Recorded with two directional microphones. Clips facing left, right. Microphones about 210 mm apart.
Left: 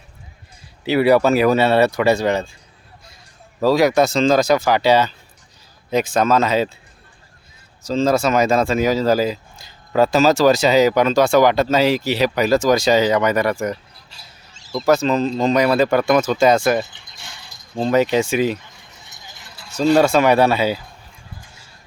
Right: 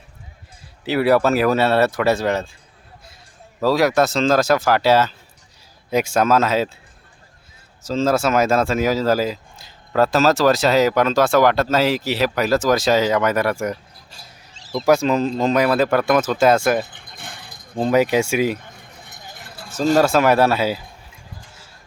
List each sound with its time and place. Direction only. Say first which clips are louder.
0.9 s speech: left 2 dB; centre (ahead or behind)
3.6 s speech: left 2 dB; centre (ahead or behind)
7.9 s speech: left 1 dB; 5° right (ahead or behind)
14.1 s speech: right 2 dB; 50° right (ahead or behind)
14.8 s speech: even; 10° right (ahead or behind)
16.8 s a sound: right 4 dB; 55° right (ahead or behind)
17.9 s speech: left 1 dB; 10° right (ahead or behind)
18.6 s a sound: right 4 dB; 55° right (ahead or behind)
20.0 s speech: even; 5° right (ahead or behind)